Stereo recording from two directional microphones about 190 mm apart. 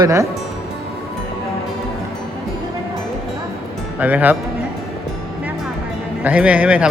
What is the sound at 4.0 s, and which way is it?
Speech, 10° right (ahead or behind).